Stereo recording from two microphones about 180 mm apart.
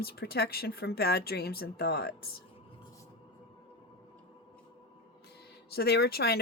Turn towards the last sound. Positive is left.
turn(degrees=60)  # may be behind; listen again after turning